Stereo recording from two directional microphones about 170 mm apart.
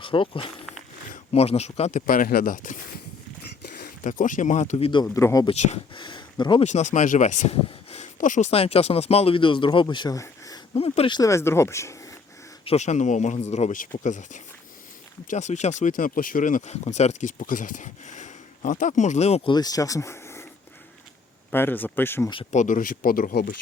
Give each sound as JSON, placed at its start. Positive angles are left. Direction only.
{"t": 0.0, "sound": "speech", "side_deg": 30}
{"t": 4.0, "sound": "speech", "side_deg": 50}
{"t": 5.0, "sound": "speech", "side_deg": 15}
{"t": 5.5, "sound": "speech", "side_deg": 40}
{"t": 6.7, "sound": "speech", "side_deg": 45}
{"t": 10.8, "sound": "speech", "side_deg": 35}
{"t": 11.2, "sound": "speech", "side_deg": 15}
{"t": 12.6, "sound": "speech", "side_deg": 40}
{"t": 19.5, "sound": "speech", "side_deg": 20}
{"t": 21.5, "sound": "speech", "side_deg": 10}
{"t": 22.5, "sound": "speech", "side_deg": 50}